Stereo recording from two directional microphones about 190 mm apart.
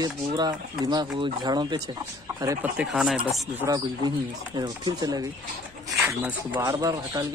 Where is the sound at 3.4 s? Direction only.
20° right (ahead or behind).